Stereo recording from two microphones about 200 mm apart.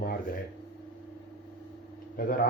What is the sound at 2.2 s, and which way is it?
Speech, 45° left (ahead or behind).